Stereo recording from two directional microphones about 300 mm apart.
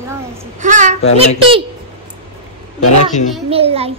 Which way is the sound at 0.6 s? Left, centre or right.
Right.